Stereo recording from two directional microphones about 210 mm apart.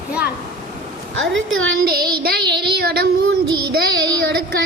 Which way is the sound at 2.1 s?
45° right (ahead or behind).